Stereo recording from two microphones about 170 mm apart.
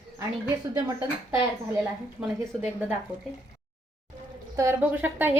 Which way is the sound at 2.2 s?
5° right (ahead or behind).